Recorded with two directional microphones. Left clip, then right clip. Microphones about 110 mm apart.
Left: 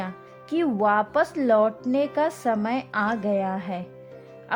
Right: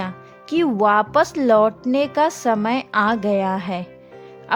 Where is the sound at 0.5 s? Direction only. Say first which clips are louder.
Right 5 dB; 35° right (ahead or behind).